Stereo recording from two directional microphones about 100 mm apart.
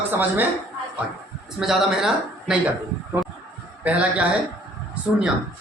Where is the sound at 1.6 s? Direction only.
Centre (ahead or behind).